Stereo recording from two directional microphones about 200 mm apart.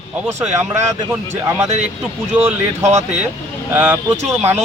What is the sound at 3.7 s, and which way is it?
Speech, 10° right (ahead or behind).